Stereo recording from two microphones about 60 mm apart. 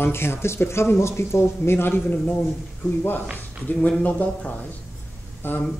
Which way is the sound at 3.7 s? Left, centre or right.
Centre.